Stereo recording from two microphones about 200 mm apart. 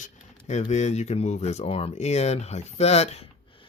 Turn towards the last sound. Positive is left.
turn(degrees=30)  # may be behind; listen again after turning